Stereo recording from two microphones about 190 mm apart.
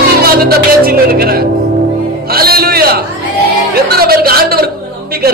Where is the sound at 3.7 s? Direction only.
55° right (ahead or behind).